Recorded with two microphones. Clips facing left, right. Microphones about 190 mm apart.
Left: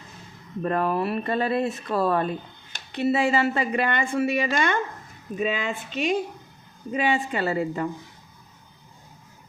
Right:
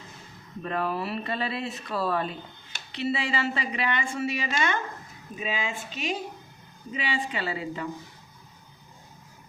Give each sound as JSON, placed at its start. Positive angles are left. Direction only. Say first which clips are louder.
{"t": 0.6, "sound": "a woman's voice", "louder": "left 5 dB", "side_deg": 45}